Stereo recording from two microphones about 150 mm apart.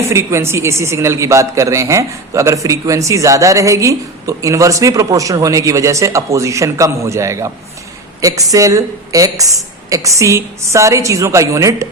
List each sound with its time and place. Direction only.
0.1 s a woman's voice: 20° right (ahead or behind)